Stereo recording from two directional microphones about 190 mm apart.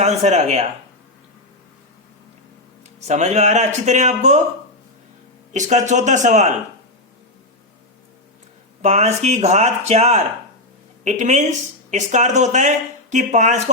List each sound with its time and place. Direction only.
0.0 s speech: 35° right (ahead or behind)
3.1 s speech: 40° right (ahead or behind)
5.5 s speech: 40° right (ahead or behind)
8.8 s speech: 35° right (ahead or behind)